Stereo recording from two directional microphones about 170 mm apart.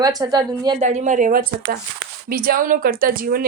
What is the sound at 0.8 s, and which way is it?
Speech, 45° right (ahead or behind).